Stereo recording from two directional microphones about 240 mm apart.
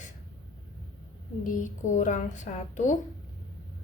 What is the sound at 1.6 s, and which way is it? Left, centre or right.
Speech, left.